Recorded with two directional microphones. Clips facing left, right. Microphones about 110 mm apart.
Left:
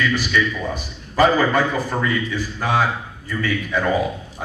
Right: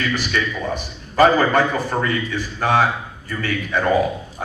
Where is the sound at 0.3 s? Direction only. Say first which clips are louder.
Left 1 dB; 45° right (ahead or behind).